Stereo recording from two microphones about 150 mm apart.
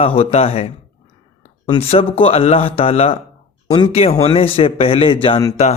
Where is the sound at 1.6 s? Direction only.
30° left (ahead or behind).